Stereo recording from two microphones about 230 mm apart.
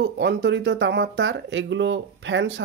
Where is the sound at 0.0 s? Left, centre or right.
Right.